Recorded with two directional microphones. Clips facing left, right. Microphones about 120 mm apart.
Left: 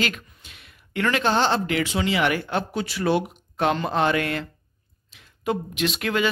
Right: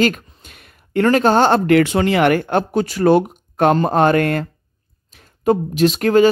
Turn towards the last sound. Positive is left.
turn(degrees=-40)  # may be behind; listen again after turning